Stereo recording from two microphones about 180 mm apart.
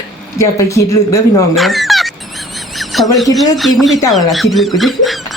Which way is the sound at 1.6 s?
Centre (ahead or behind).